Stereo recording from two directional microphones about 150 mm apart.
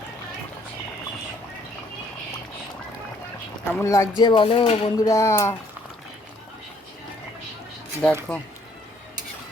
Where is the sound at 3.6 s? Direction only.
15° left (ahead or behind); by 4.9 s 40° left (ahead or behind).